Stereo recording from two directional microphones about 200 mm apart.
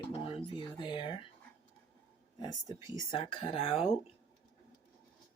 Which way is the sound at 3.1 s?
25° left (ahead or behind).